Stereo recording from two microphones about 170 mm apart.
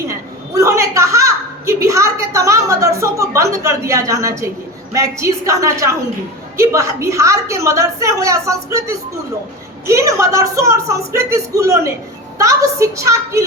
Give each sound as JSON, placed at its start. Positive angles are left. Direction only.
{"t": 0.1, "sound": "a woman's voice", "side_deg": -20}